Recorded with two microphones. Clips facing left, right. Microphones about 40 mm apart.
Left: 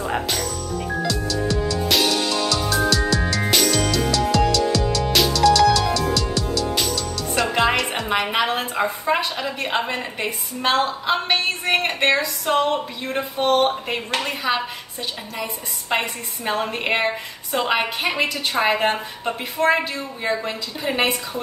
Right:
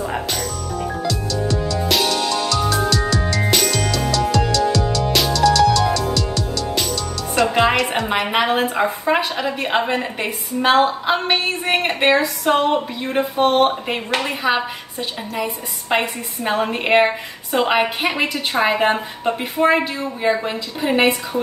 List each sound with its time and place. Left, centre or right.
1.0 s music: centre
8.3 s a woman's voice: centre
12.2 s a woman's voice: right